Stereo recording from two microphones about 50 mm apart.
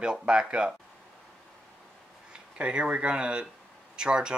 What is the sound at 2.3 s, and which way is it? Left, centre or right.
Speech, right.